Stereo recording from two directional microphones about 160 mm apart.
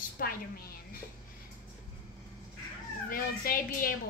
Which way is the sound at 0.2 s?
70° left (ahead or behind).